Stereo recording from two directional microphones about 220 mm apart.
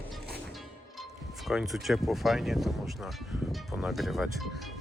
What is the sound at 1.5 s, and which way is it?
Speech, centre (ahead or behind).